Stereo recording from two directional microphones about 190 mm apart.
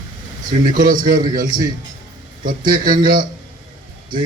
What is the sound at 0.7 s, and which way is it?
Speech, 45° right (ahead or behind).